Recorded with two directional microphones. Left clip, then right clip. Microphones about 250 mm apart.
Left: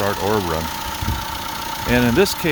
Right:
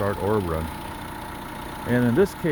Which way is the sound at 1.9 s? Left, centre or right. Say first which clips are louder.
Left 4 dB; left.